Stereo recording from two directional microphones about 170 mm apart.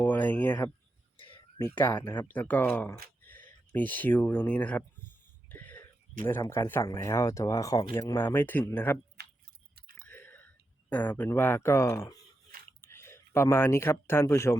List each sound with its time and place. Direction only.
0.0 s a sound: 10° left (ahead or behind)
1.5 s speech: 15° left (ahead or behind)
1.9 s speech: 25° left (ahead or behind)
2.1 s speech: 10° left (ahead or behind)
5.5 s throat clearing: 10° left (ahead or behind)
6.5 s speech: 15° left (ahead or behind)
9.2 s tick-tock: 75° right (ahead or behind)
10.1 s a sound: 10° left (ahead or behind)
12.8 s speech: 15° left (ahead or behind)